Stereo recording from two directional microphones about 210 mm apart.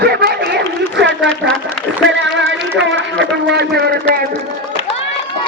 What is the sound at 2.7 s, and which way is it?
A man's voice, 60° right (ahead or behind).